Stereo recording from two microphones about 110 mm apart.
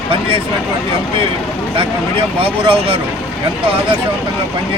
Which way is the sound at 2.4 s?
60° right (ahead or behind).